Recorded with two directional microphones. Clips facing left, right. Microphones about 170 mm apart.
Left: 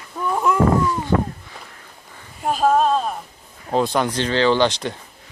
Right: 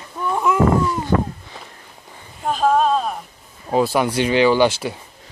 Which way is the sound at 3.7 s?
5° right (ahead or behind).